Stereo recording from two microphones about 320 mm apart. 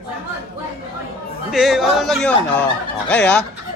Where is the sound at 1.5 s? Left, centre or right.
Centre.